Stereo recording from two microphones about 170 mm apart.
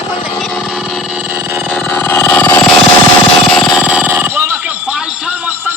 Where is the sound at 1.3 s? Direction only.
15° right (ahead or behind).